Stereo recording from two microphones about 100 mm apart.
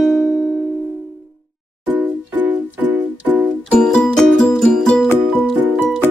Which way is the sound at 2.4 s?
15° right (ahead or behind).